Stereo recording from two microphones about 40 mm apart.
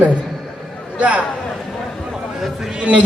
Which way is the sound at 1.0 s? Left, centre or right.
Right.